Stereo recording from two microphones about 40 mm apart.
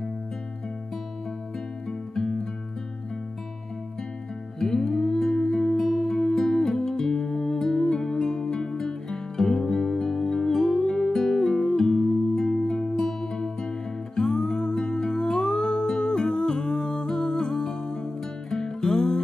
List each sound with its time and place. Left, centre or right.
1.9 s music: centre
4.6 s music: centre
18.5 s music: centre